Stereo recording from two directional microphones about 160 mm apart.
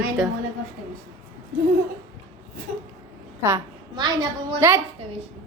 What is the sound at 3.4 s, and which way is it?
A woman's voice, 20° right (ahead or behind).